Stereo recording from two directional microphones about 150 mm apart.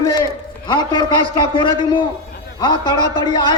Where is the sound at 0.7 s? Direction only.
30° left (ahead or behind).